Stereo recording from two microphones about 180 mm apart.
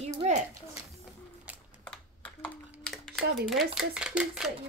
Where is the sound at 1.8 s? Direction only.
5° left (ahead or behind).